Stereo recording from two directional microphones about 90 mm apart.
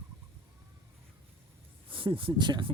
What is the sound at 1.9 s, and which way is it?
Speech, 75° right (ahead or behind).